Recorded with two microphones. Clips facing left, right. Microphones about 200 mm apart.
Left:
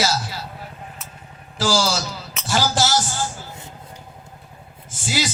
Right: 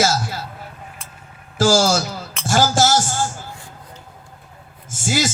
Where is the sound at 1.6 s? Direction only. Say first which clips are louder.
Right 5 dB; 45° right (ahead or behind).